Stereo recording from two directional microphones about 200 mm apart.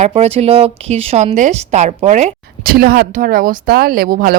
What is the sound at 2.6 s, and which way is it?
Speech, 50° right (ahead or behind).